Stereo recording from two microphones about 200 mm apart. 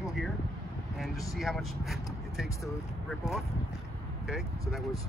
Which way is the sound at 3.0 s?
Centre (ahead or behind).